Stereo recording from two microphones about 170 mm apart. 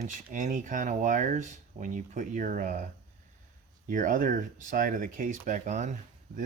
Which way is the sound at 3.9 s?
50° right (ahead or behind).